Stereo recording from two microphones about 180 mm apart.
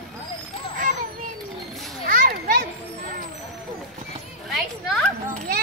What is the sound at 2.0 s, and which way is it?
Children playing, 50° right (ahead or behind).